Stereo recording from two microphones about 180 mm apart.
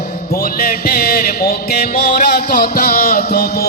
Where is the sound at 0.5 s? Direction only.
55° left (ahead or behind).